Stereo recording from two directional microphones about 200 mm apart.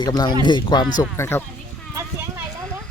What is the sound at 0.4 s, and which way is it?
Speech, 20° left (ahead or behind).